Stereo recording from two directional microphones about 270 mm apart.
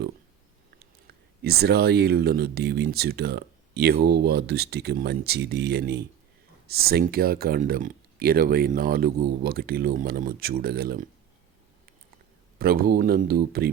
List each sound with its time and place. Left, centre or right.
1.0 s speech: right
12.5 s speech: right